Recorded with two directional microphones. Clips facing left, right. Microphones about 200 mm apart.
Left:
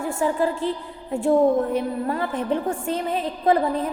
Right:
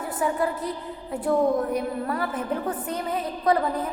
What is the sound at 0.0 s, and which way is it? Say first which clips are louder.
Speech: left 3 dB; 25° left (ahead or behind).